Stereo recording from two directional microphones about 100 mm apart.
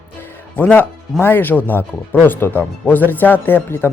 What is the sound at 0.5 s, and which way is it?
Speech, 15° left (ahead or behind).